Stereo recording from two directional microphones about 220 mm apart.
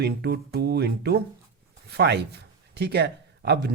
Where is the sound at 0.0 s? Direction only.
50° right (ahead or behind).